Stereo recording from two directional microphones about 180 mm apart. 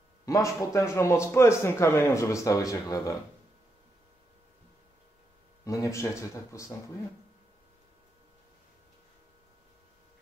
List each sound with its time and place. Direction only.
0.2 s a man's voice: 20° left (ahead or behind)
5.7 s a man's voice: 15° left (ahead or behind)